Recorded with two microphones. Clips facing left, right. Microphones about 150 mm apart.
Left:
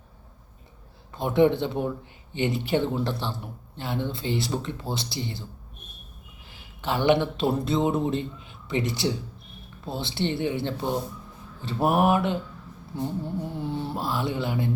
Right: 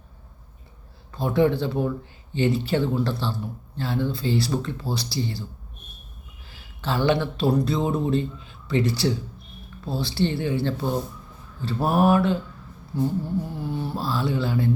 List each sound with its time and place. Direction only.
1.1 s speech: 20° left (ahead or behind)
6.5 s speech: 20° left (ahead or behind)